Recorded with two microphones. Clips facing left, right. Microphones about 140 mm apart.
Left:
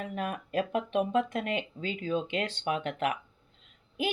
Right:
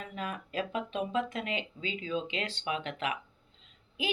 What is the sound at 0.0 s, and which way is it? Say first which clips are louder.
A woman's voice: left 4 dB; 55° left (ahead or behind).